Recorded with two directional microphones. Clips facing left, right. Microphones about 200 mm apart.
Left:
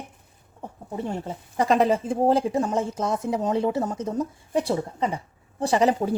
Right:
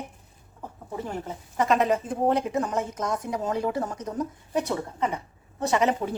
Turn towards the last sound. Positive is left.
turn(degrees=35)  # may be behind; listen again after turning